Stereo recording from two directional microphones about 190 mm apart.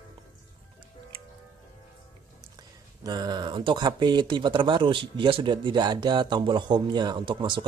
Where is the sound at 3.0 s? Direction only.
20° right (ahead or behind).